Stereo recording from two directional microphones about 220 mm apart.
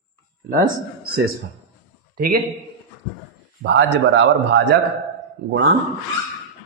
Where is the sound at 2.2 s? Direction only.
45° right (ahead or behind).